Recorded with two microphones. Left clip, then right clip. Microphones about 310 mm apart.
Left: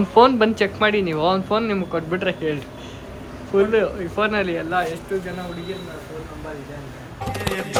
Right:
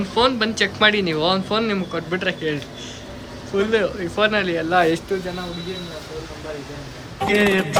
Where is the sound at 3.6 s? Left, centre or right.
Centre.